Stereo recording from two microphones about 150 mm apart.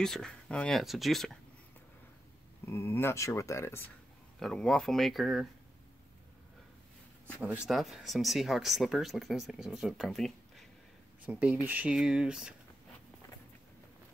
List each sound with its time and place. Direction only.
0.0 s speech: 5° left (ahead or behind)
2.6 s speech: 15° left (ahead or behind)
4.4 s speech: 5° left (ahead or behind)
7.4 s speech: 5° right (ahead or behind)